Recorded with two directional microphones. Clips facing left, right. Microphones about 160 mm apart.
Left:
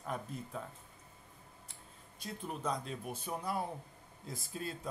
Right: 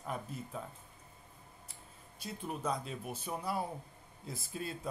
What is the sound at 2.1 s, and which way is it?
A man's voice, 5° right (ahead or behind).